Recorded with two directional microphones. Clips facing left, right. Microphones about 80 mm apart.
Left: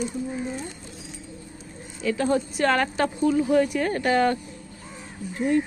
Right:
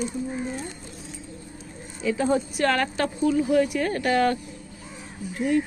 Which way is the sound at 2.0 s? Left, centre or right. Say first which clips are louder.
Even; centre.